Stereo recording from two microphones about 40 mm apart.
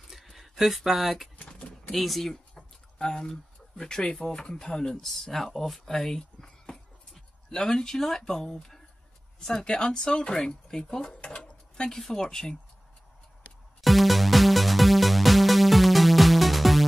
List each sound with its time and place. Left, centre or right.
0.1 s a sound: centre
0.9 s speech: centre
1.9 s speech: centre
2.5 s speech: centre
11.7 s a sound: centre
12.0 s speech: centre
13.7 s music: centre